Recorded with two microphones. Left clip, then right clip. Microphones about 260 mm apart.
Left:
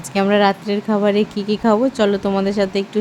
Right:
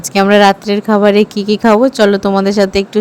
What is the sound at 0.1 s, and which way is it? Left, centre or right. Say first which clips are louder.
Speech: right 7 dB; right.